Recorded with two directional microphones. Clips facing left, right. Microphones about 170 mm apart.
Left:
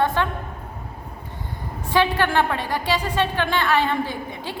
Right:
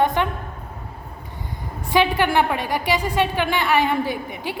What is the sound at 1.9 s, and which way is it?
A woman's voice, 15° right (ahead or behind).